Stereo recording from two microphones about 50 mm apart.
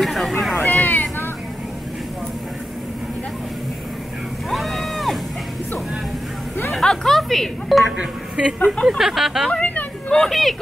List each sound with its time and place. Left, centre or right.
0.0 s cat: centre
0.7 s cat: left
4.5 s run: centre
6.7 s music: centre
8.0 s speech: centre
8.5 s speech: left
8.8 s speech: centre
9.5 s a sound: left
10.1 s speech: centre